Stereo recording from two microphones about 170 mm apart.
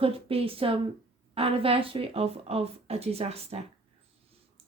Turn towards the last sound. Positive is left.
turn(degrees=-35)  # may be behind; listen again after turning